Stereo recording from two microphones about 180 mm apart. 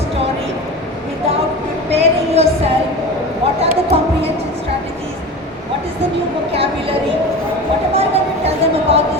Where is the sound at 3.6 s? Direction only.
35° right (ahead or behind).